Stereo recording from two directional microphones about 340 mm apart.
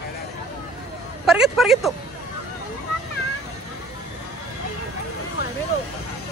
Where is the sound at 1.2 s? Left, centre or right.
Centre.